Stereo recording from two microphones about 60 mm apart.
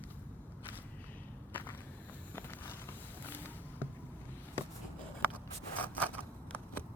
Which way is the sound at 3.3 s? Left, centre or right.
Left.